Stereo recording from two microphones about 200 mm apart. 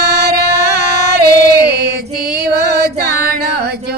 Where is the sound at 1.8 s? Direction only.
50° right (ahead or behind).